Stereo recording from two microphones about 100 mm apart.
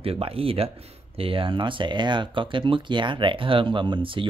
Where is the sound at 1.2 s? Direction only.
65° right (ahead or behind).